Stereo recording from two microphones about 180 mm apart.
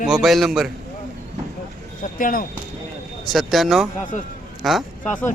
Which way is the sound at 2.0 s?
50° left (ahead or behind).